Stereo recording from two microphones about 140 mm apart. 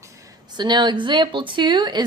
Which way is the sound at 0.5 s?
30° right (ahead or behind).